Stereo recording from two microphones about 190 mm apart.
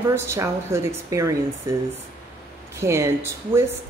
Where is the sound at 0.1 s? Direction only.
15° right (ahead or behind).